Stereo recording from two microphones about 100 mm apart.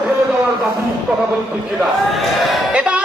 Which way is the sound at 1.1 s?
10° right (ahead or behind).